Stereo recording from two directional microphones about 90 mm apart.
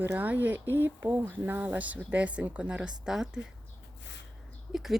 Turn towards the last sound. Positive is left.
turn(degrees=-5)  # may be behind; listen again after turning